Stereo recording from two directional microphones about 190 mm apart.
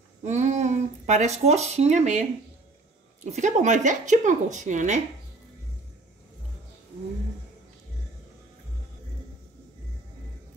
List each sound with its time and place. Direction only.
0.2 s speech: 40° right (ahead or behind)
3.3 s speech: 40° right (ahead or behind)